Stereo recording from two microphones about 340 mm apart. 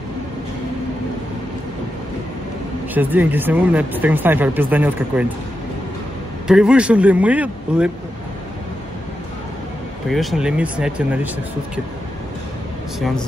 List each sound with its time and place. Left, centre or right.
2.9 s speech: centre
6.4 s speech: centre
10.0 s speech: centre